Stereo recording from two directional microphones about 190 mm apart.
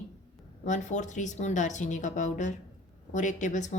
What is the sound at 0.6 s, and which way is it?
A woman's voice, 40° left (ahead or behind).